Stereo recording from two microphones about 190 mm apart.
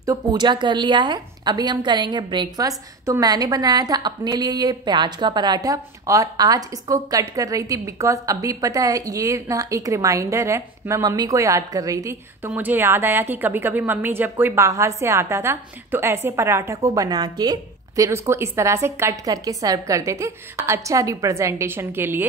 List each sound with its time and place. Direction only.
0.0 s a woman's voice: 20° right (ahead or behind)